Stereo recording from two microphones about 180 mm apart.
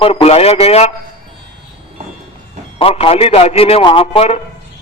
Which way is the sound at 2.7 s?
30° left (ahead or behind).